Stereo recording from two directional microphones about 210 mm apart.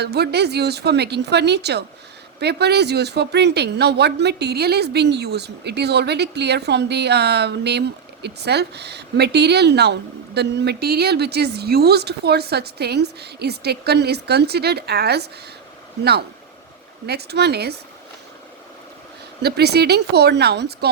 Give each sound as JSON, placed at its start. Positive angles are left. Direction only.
{"t": 0.0, "sound": "speech", "side_deg": -50}
{"t": 17.1, "sound": "speech", "side_deg": -50}
{"t": 19.4, "sound": "speech", "side_deg": -50}